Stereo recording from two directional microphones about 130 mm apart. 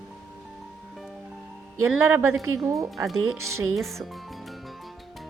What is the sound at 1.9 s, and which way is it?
Speech, 15° right (ahead or behind).